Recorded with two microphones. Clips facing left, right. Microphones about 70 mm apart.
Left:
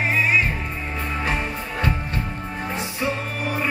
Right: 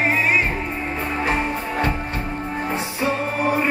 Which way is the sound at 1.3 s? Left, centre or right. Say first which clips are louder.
Right 4 dB; centre.